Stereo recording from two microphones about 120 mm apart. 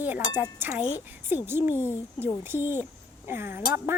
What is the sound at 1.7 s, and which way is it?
Speech, 20° left (ahead or behind).